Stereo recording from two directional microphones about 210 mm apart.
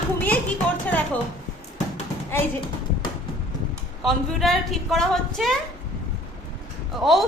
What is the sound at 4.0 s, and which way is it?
A woman's voice, centre (ahead or behind).